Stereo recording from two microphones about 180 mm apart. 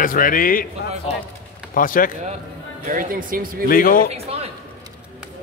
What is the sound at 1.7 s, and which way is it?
Speech, 50° left (ahead or behind).